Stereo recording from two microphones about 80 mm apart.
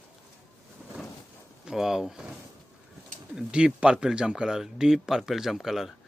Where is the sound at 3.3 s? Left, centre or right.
Centre.